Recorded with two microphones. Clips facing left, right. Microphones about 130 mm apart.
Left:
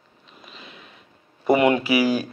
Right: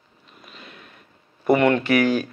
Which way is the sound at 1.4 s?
5° left (ahead or behind).